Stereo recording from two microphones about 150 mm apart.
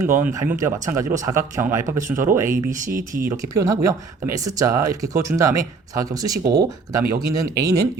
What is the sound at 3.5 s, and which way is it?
Speech, 20° right (ahead or behind).